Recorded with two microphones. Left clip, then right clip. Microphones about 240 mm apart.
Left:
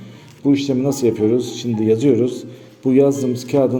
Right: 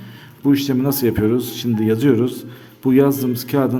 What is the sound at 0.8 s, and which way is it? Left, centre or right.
Speech, right.